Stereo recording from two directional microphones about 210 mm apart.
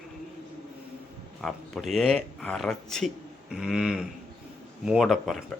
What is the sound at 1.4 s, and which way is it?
A man's voice, centre (ahead or behind).